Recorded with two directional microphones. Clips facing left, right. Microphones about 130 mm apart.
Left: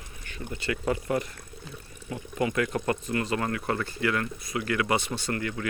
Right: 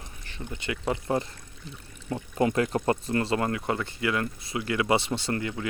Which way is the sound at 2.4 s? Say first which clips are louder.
Right 2 dB; 35° right (ahead or behind).